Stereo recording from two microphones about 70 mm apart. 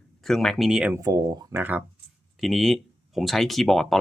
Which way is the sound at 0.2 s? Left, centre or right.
Centre.